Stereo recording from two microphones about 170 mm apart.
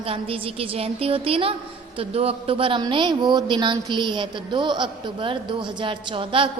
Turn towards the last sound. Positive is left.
turn(degrees=-30)  # may be behind; listen again after turning